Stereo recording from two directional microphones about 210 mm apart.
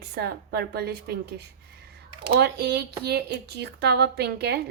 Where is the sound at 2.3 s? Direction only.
50° right (ahead or behind).